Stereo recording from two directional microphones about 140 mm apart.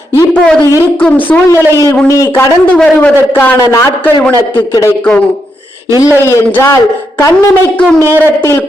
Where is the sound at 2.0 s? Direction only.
20° left (ahead or behind).